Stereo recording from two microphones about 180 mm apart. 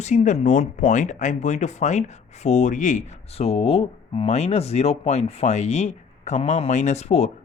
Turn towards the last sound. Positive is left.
turn(degrees=40)  # may be behind; listen again after turning